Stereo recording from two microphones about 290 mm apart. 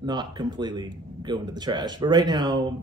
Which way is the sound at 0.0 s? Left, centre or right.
Centre.